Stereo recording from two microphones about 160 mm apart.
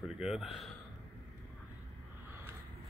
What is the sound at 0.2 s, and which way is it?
Speech, 5° right (ahead or behind).